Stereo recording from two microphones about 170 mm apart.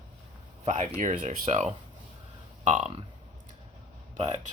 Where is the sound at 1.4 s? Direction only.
40° right (ahead or behind).